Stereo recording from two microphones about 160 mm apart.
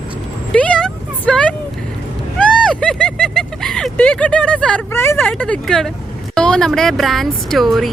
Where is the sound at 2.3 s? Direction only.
5° left (ahead or behind).